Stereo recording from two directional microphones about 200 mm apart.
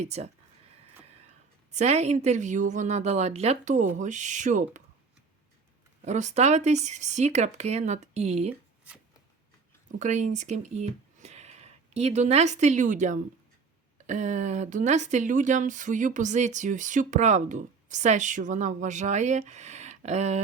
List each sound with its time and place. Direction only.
0.0 s speech: 35° right (ahead or behind)
1.7 s speech: 35° right (ahead or behind)
6.1 s speech: 35° right (ahead or behind)
8.9 s shuffling cards: 5° right (ahead or behind)
10.0 s speech: 35° right (ahead or behind)